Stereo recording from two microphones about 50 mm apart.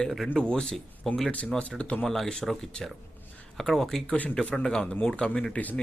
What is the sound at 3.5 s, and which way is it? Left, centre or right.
Speech, centre.